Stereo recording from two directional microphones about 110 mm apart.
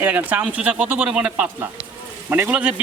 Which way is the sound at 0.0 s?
15° right (ahead or behind).